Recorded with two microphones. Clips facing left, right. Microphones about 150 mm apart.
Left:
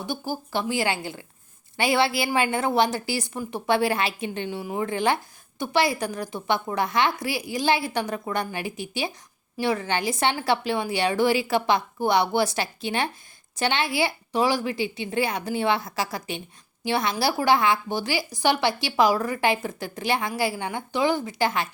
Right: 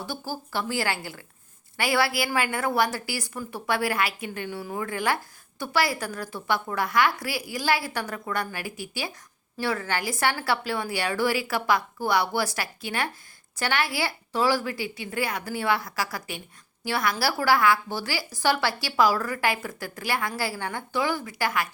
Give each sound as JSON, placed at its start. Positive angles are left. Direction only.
{"t": 0.0, "sound": "a woman's voice", "side_deg": 15}